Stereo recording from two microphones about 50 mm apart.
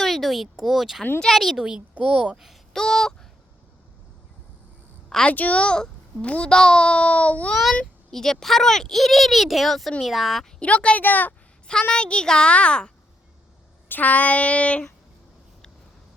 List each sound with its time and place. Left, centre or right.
0.0 s a sound: centre
0.5 s speech: centre
1.6 s a child's voice: right
2.3 s speech: centre
2.7 s a child's voice: centre
5.0 s a sound: centre
5.3 s a child's voice: left
7.5 s speech: centre
10.6 s a child's voice: left
11.0 s a woman's voice: left
11.7 s a child's voice: centre
13.8 s a child's voice: left